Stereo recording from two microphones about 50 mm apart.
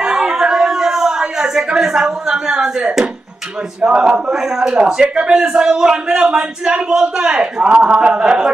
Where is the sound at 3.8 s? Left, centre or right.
Right.